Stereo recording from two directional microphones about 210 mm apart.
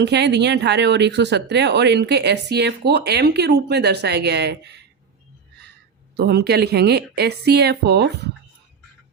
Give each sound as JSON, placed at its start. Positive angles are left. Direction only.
{"t": 0.0, "sound": "speech", "side_deg": -55}
{"t": 6.1, "sound": "speech", "side_deg": -50}